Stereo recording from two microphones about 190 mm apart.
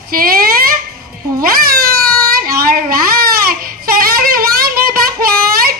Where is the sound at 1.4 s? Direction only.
50° right (ahead or behind).